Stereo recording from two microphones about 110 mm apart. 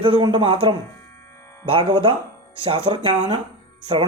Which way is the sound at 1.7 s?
55° right (ahead or behind).